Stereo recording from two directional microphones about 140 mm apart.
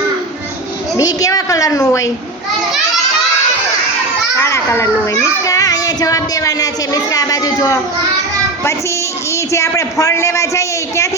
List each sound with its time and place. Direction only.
0.9 s a man's voice: 25° left (ahead or behind)
4.4 s children playing: 20° left (ahead or behind)
5.5 s speech: 25° left (ahead or behind)
9.3 s a man's voice: 20° left (ahead or behind)